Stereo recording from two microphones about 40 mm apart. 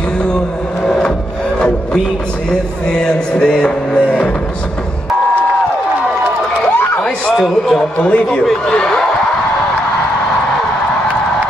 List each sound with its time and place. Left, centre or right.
3.0 s music: left
7.3 s a man's voice: centre
8.0 s a man's voice: left
8.6 s speech: left